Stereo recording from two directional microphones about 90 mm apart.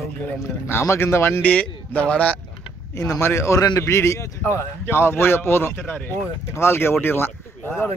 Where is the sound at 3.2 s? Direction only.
30° left (ahead or behind).